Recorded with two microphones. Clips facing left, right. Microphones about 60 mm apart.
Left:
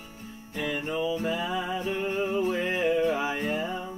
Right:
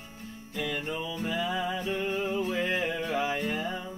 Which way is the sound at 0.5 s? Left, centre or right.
Left.